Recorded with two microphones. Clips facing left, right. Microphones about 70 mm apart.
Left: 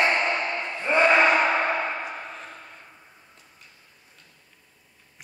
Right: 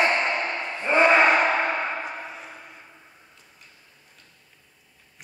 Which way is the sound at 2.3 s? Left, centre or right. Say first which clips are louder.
Even; centre.